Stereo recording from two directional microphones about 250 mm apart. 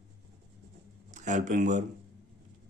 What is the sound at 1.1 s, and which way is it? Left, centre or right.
Speech, right.